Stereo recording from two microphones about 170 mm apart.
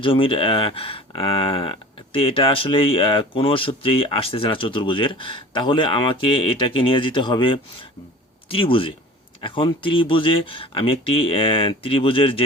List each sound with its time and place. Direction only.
0.0 s speech: 30° left (ahead or behind)